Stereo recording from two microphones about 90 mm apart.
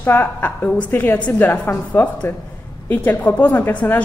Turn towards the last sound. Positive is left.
turn(degrees=20)  # may be behind; listen again after turning